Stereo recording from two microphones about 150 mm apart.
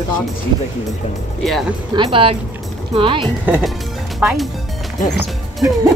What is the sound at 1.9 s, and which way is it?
Speech, 25° right (ahead or behind).